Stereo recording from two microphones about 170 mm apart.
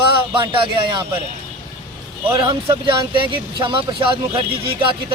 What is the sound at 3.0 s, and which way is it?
Speech, 30° right (ahead or behind).